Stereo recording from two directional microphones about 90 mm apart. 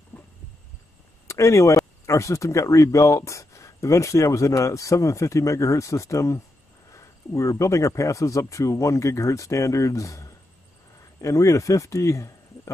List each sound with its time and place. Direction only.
1.2 s speech: 35° left (ahead or behind)